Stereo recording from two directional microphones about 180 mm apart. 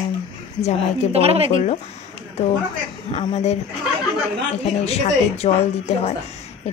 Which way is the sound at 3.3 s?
35° left (ahead or behind).